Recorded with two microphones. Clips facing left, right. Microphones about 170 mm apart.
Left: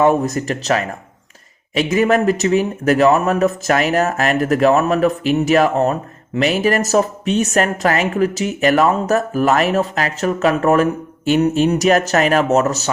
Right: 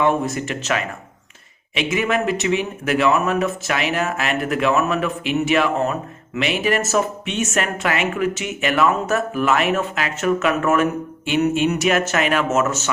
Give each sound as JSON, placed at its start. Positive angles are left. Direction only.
{"t": 0.0, "sound": "a man's voice", "side_deg": 40}